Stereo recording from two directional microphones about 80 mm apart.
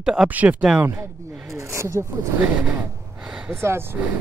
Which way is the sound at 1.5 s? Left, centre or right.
Right.